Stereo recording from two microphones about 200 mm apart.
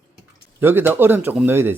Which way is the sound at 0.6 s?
10° right (ahead or behind).